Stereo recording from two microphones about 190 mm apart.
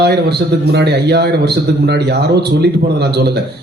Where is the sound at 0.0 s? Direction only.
60° right (ahead or behind).